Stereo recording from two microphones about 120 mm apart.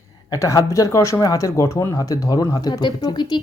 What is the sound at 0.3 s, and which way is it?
Speech, 30° left (ahead or behind).